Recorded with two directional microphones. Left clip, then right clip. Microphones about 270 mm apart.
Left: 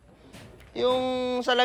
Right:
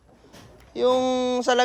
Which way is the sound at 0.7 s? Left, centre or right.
Centre.